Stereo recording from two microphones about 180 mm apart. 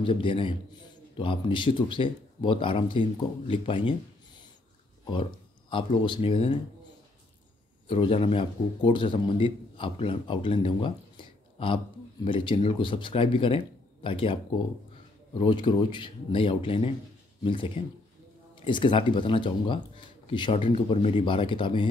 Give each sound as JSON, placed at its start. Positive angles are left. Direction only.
{"t": 0.0, "sound": "a man's voice", "side_deg": 30}
{"t": 5.7, "sound": "a man's voice", "side_deg": 30}
{"t": 7.9, "sound": "a man's voice", "side_deg": 30}